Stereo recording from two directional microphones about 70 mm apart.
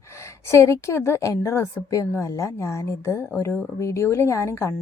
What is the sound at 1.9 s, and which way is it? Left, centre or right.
A woman's voice, left.